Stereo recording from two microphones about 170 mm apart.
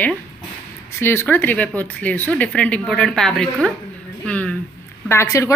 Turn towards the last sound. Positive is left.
turn(degrees=15)  # may be behind; listen again after turning